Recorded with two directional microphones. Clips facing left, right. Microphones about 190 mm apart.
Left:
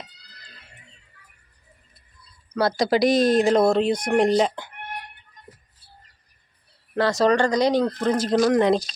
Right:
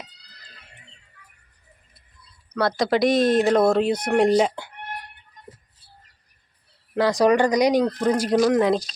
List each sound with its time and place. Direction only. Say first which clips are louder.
2.5 s speech: left 1 dB; centre (ahead or behind)
6.9 s speech: right 1 dB; 15° right (ahead or behind)